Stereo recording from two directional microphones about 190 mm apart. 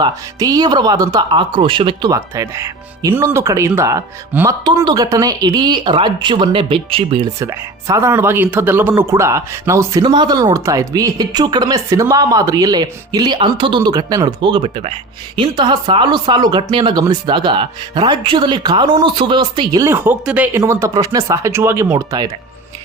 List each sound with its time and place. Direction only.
0.0 s speech: 20° right (ahead or behind)
7.3 s speech: 15° right (ahead or behind)